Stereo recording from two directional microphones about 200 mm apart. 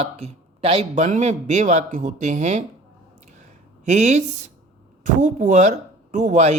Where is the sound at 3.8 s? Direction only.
35° right (ahead or behind).